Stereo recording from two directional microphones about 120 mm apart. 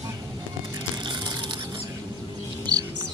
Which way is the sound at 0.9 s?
40° right (ahead or behind).